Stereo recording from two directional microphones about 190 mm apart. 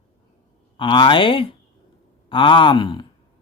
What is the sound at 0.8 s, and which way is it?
Speech, 25° left (ahead or behind).